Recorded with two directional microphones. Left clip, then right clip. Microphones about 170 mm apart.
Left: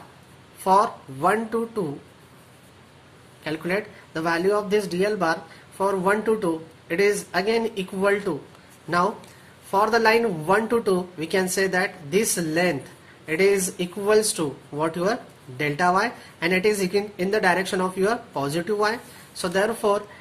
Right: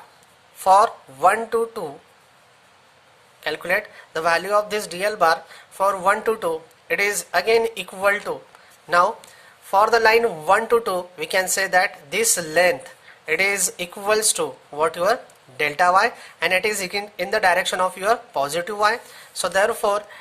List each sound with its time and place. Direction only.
0.7 s speech: 45° right (ahead or behind)
3.4 s speech: 45° right (ahead or behind)
9.7 s speech: 40° right (ahead or behind)